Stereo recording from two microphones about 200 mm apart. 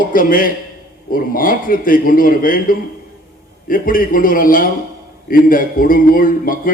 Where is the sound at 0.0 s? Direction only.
45° left (ahead or behind).